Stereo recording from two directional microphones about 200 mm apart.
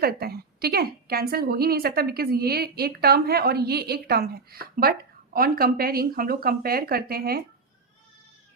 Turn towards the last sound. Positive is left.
turn(degrees=-50)  # may be behind; listen again after turning